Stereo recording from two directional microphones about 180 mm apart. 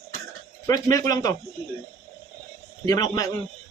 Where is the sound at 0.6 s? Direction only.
20° left (ahead or behind).